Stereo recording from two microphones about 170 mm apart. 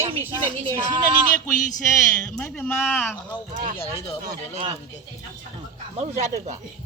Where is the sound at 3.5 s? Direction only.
50° right (ahead or behind).